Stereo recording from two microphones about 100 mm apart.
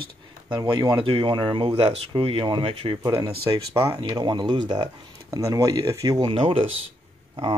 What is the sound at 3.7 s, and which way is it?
Speech, 30° right (ahead or behind).